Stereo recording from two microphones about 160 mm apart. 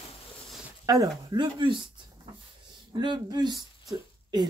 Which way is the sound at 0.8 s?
25° right (ahead or behind).